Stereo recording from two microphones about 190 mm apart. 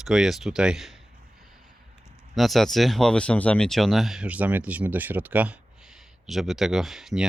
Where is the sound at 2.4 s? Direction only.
Centre (ahead or behind).